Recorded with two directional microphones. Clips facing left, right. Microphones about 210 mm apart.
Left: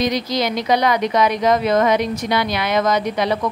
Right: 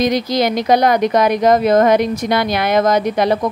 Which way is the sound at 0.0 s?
50° right (ahead or behind).